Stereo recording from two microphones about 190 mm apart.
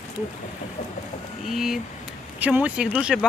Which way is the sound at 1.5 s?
Centre (ahead or behind).